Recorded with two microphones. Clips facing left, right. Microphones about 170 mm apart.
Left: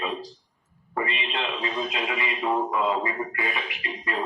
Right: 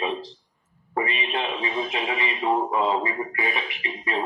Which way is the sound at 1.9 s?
25° right (ahead or behind).